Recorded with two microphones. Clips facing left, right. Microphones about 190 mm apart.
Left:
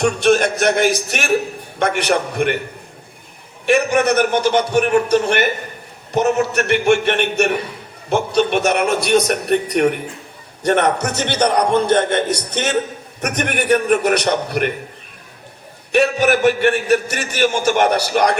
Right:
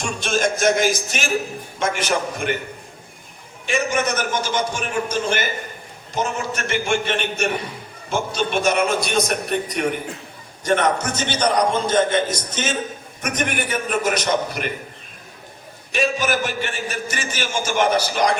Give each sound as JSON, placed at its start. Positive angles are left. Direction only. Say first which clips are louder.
{"t": 0.0, "sound": "a man's voice", "louder": "left 7 dB", "side_deg": 65}
{"t": 3.7, "sound": "a man's voice", "louder": "left 7 dB", "side_deg": 65}
{"t": 15.9, "sound": "a man's voice", "louder": "left 6 dB", "side_deg": 65}